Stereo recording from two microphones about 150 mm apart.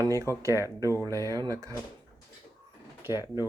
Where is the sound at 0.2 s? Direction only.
20° right (ahead or behind).